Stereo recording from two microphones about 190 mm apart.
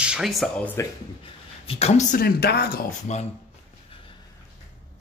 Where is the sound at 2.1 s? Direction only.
55° left (ahead or behind).